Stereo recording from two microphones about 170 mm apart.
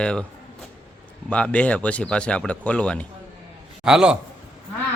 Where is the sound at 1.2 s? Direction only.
5° left (ahead or behind).